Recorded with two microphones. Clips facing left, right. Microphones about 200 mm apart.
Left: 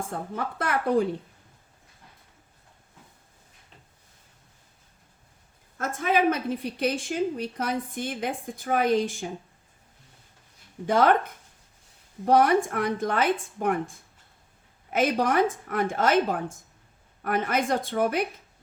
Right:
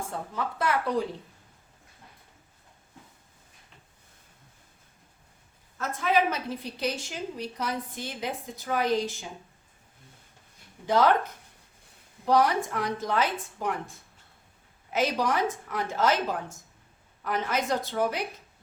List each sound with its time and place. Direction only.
0.3 s a woman's voice: 55° left (ahead or behind)
5.7 s a woman's voice: 50° left (ahead or behind)
10.8 s a woman's voice: 55° left (ahead or behind)
12.2 s a woman's voice: 55° left (ahead or behind)
14.9 s a woman's voice: 55° left (ahead or behind)